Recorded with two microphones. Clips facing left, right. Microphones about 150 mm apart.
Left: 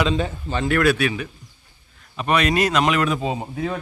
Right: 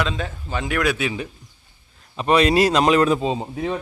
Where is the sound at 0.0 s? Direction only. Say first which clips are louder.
Left 4 dB; centre (ahead or behind).